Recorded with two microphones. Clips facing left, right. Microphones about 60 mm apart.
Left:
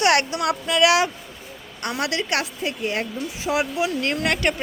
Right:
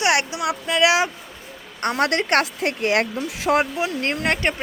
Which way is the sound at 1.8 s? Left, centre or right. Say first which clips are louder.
Right 5 dB; right.